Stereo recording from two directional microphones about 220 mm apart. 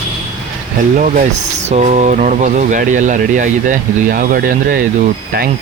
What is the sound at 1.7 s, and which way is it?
Speech, 30° right (ahead or behind).